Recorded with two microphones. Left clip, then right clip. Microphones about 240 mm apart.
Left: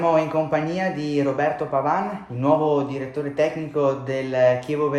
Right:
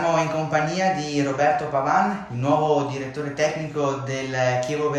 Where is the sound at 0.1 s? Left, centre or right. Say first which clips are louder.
Left 2 dB; left.